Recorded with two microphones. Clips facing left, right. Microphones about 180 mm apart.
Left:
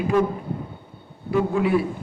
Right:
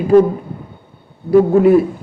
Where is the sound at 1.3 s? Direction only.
40° right (ahead or behind).